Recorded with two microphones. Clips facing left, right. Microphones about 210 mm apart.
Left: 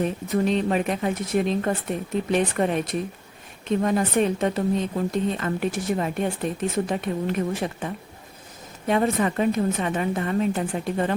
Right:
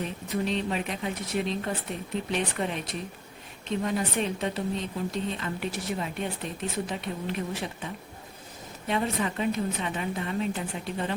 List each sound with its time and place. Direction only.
0.0 s a woman's voice: 50° left (ahead or behind)
8.9 s a woman's voice: 50° left (ahead or behind)